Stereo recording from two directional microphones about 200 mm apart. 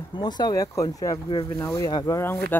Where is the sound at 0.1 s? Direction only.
20° left (ahead or behind).